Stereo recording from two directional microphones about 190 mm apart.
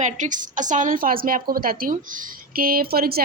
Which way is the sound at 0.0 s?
40° right (ahead or behind).